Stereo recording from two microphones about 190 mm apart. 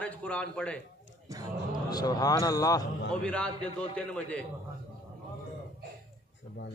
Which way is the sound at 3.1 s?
5° left (ahead or behind).